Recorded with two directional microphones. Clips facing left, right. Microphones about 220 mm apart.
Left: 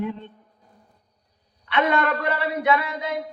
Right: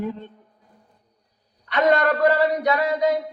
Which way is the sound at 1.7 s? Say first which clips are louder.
Right 3 dB; 40° right (ahead or behind).